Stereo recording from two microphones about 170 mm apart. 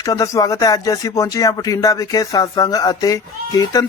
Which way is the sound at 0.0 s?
20° left (ahead or behind).